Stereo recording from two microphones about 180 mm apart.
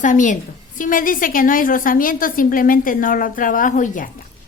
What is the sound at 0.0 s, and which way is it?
A woman's voice, 45° left (ahead or behind).